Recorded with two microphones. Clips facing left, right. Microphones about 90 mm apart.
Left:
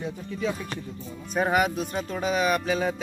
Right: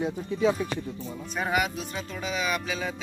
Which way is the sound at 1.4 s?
40° left (ahead or behind).